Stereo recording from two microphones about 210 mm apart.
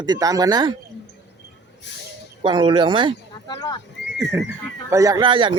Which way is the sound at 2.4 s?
25° right (ahead or behind).